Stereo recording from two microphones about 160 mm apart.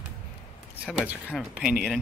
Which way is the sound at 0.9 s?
10° right (ahead or behind).